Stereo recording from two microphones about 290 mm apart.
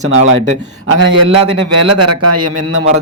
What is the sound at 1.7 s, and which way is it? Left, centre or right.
A man's voice, right.